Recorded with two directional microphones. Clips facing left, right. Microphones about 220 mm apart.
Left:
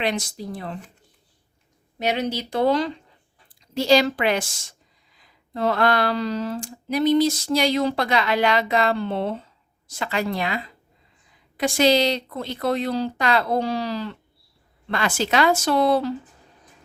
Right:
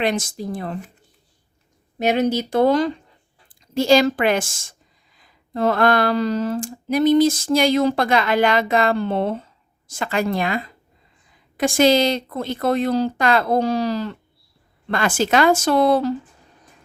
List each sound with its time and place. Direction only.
0.0 s speech: 50° right (ahead or behind)
2.0 s a woman's voice: 45° right (ahead or behind)